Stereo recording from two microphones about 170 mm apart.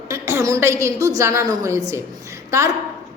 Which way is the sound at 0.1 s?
15° right (ahead or behind).